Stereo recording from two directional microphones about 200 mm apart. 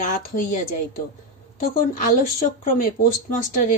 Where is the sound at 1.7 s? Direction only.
45° left (ahead or behind).